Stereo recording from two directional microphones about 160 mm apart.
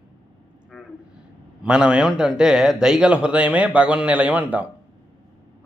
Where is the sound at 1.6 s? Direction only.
5° right (ahead or behind).